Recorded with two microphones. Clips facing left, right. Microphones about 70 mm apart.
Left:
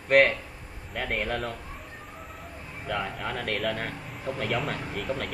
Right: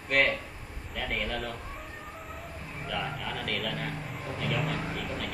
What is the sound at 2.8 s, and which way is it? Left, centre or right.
Speech, left.